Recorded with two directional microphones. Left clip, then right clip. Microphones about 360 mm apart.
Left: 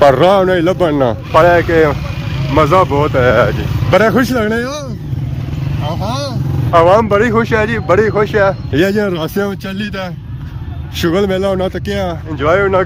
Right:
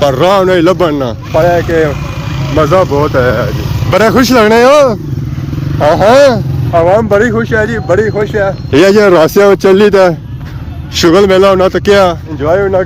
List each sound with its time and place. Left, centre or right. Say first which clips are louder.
0.0 s speech: right 1 dB; centre
6.1 s speech: right 17 dB; centre
6.7 s speech: right 1 dB; centre
8.7 s speech: right 9 dB; centre
10.9 s speech: right 9 dB; centre